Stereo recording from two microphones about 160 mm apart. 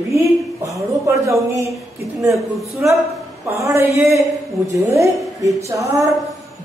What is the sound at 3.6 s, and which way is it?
A man's voice, 15° right (ahead or behind).